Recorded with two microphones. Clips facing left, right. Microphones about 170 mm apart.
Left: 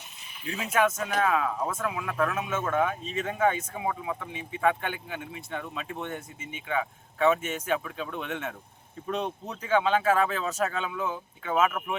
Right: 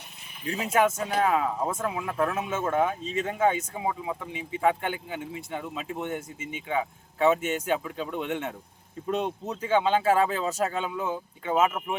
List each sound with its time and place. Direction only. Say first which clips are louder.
0.4 s speech: right 2 dB; 35° right (ahead or behind); by 6.2 s 15° right (ahead or behind)
6.7 s speech: right 1 dB; 25° right (ahead or behind)